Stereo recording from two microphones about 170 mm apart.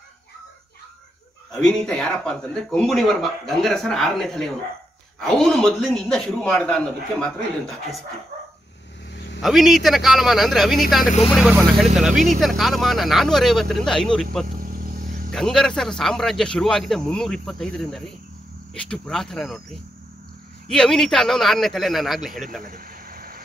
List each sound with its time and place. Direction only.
1.5 s speech: 5° left (ahead or behind)
9.1 s vehicle: 90° left
9.4 s speech: centre (ahead or behind)
14.6 s vehicle: 55° right (ahead or behind)
15.3 s speech: 5° left (ahead or behind)
20.6 s speech: 5° left (ahead or behind)
22.7 s a sound: 60° right (ahead or behind)